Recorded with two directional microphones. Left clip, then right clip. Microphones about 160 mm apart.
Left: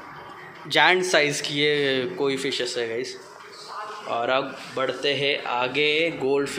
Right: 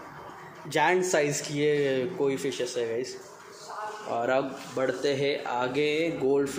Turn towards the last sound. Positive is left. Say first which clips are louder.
# left 4 dB
turn(degrees=-20)  # may be behind; listen again after turning